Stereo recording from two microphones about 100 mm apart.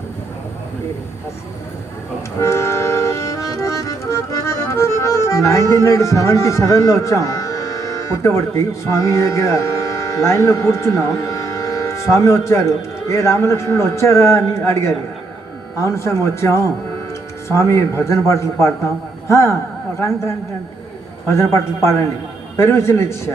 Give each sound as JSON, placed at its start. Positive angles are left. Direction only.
{"t": 2.4, "sound": "music", "side_deg": 30}
{"t": 12.1, "sound": "a man's voice", "side_deg": 30}